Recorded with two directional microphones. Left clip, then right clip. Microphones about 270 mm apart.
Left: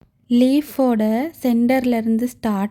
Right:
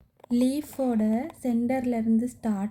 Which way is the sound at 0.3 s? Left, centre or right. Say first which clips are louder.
Left 10 dB; left.